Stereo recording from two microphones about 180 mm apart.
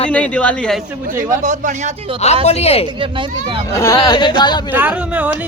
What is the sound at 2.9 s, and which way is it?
Speech, 30° right (ahead or behind).